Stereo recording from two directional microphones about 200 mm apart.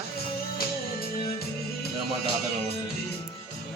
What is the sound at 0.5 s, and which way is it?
Music, 50° left (ahead or behind).